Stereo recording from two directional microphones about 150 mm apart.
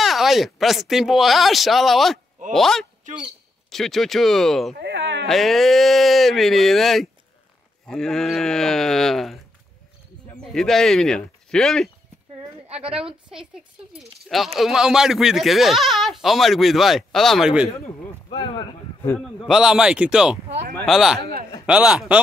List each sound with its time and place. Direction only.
0.0 s speech: centre (ahead or behind)
10.5 s speech: 5° left (ahead or behind)
18.3 s speech: 35° left (ahead or behind)
19.0 s speech: centre (ahead or behind)
21.2 s a man's voice: 90° right
21.6 s a man's voice: 5° right (ahead or behind)